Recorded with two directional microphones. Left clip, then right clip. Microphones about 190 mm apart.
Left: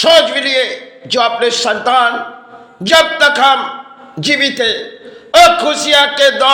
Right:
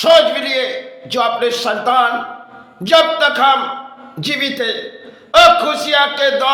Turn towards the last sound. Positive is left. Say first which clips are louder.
# left 4 dB
turn(degrees=20)  # may be behind; listen again after turning